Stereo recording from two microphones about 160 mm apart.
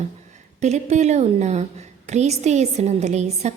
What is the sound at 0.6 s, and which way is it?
A woman's voice, 45° right (ahead or behind).